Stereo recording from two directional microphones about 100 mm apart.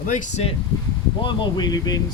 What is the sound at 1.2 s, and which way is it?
Speech, 50° left (ahead or behind).